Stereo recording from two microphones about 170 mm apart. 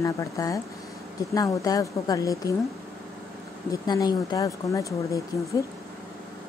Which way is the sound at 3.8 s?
25° left (ahead or behind).